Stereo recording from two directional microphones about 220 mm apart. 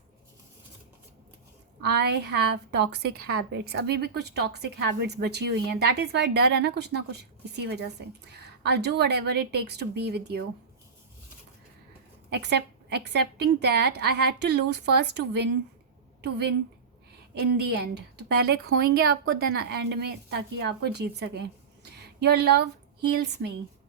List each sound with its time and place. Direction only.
1.8 s speech: 50° right (ahead or behind)
12.3 s speech: 50° right (ahead or behind)